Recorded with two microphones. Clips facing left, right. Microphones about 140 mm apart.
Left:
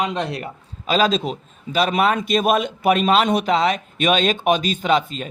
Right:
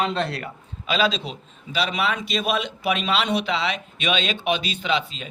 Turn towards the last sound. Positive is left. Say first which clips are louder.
# left 6 dB
turn(degrees=45)  # may be behind; listen again after turning